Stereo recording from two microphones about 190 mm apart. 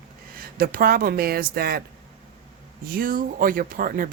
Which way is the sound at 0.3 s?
50° right (ahead or behind).